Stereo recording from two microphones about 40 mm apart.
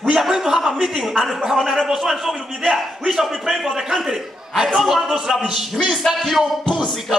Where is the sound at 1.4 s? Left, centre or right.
Centre.